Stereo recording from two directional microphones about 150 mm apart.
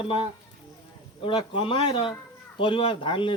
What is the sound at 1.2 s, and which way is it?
Speech, 35° left (ahead or behind).